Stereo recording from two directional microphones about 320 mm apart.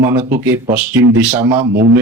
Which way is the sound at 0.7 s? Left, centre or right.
Centre.